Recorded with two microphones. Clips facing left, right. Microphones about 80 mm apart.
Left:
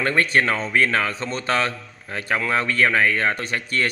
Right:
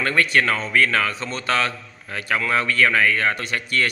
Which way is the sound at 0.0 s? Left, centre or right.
Left.